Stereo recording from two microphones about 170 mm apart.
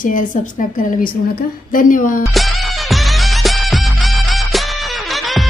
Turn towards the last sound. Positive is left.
turn(degrees=0)  # may be behind; listen again after turning